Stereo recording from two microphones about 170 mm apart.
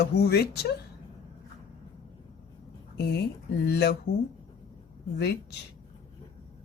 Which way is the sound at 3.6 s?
70° left (ahead or behind).